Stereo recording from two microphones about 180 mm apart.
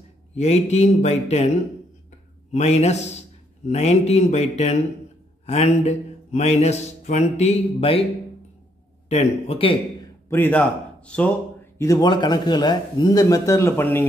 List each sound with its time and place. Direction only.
0.4 s a man's voice: 40° left (ahead or behind)
2.5 s a man's voice: 35° left (ahead or behind)
9.1 s a man's voice: 35° left (ahead or behind)
10.3 s a man's voice: 10° left (ahead or behind)
11.8 s a man's voice: 20° left (ahead or behind)